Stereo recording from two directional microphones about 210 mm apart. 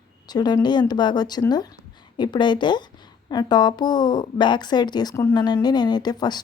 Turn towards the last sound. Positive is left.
turn(degrees=20)  # may be behind; listen again after turning